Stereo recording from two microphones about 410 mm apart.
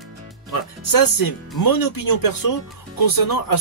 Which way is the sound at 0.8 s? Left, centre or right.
Left.